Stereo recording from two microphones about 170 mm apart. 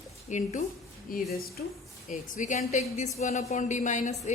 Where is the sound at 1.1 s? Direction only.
60° left (ahead or behind).